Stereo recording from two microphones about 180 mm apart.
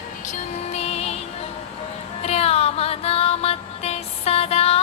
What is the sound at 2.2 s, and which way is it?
Music, 35° left (ahead or behind).